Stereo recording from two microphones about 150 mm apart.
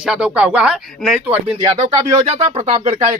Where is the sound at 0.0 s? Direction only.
5° right (ahead or behind).